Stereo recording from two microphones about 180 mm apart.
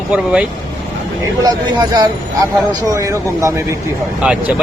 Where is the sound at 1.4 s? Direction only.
25° right (ahead or behind).